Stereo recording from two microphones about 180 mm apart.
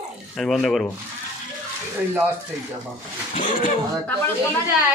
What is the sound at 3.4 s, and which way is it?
Speech, 45° left (ahead or behind).